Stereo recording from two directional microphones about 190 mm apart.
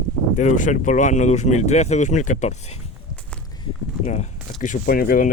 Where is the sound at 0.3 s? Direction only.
40° left (ahead or behind).